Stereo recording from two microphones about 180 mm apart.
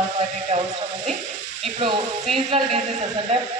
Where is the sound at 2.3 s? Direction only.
35° right (ahead or behind).